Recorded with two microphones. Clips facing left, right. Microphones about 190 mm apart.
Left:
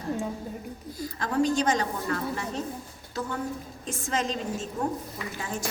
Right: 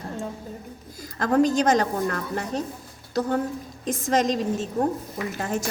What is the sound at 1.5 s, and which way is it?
A woman's voice, 40° right (ahead or behind).